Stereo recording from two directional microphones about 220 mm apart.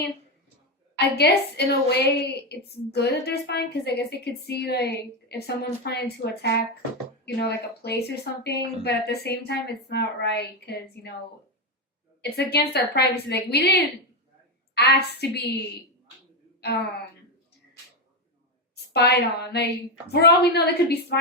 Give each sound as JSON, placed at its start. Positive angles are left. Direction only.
{"t": 0.9, "sound": "a woman's voice", "side_deg": 50}
{"t": 12.2, "sound": "a woman's voice", "side_deg": 45}
{"t": 18.9, "sound": "a woman's voice", "side_deg": 50}